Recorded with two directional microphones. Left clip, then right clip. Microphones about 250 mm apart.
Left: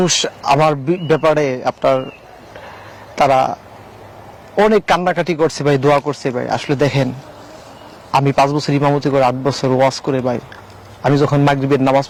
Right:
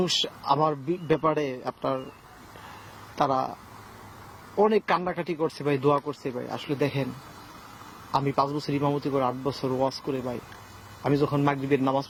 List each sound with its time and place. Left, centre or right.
0.0 s speech: centre
3.2 s speech: left
4.7 s speech: centre
8.1 s speech: centre